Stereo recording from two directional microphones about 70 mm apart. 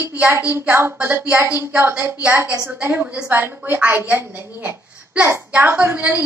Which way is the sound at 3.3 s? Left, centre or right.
Right.